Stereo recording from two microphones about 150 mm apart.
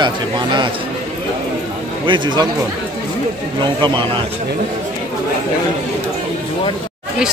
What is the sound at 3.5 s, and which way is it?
Speech, 30° right (ahead or behind).